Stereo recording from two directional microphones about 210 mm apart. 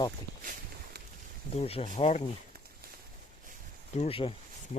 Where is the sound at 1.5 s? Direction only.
30° left (ahead or behind).